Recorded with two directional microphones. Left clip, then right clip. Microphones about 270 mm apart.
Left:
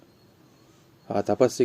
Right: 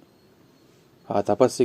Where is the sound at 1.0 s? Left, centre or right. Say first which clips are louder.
Right 2 dB; centre.